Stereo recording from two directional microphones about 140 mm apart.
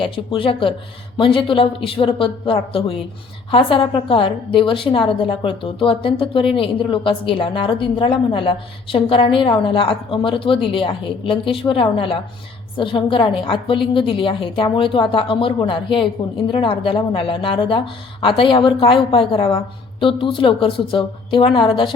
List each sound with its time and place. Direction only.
0.0 s a woman's voice: 40° left (ahead or behind)